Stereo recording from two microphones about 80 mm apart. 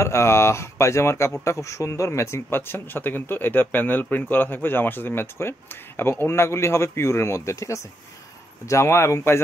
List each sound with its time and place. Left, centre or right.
0.0 s speech: left